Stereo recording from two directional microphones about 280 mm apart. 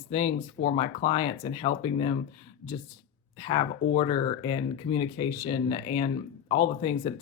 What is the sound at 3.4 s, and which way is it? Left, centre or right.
Speech, centre.